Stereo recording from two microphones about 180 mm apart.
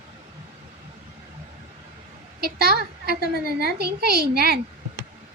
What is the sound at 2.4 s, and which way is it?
A child's voice, 55° right (ahead or behind).